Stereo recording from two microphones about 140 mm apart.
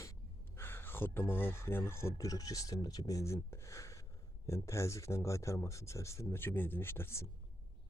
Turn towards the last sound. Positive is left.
turn(degrees=20)  # may be behind; listen again after turning